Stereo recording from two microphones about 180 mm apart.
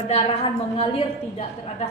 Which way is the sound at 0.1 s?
30° left (ahead or behind).